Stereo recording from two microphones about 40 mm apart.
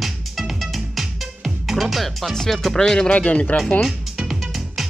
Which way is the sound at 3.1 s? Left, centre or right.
Left.